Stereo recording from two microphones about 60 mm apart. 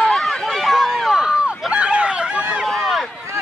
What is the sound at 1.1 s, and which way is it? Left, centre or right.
Run, centre.